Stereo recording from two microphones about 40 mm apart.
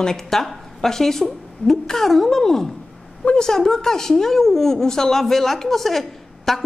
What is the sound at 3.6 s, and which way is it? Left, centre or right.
A woman's voice, centre.